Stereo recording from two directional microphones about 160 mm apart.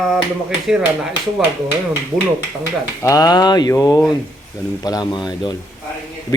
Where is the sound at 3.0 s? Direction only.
25° left (ahead or behind).